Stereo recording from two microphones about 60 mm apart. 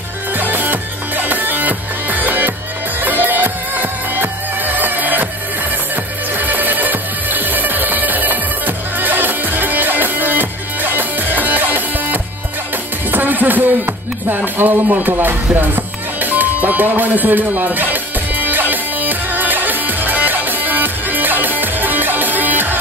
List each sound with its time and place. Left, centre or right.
0.4 s music: right
6.3 s music: right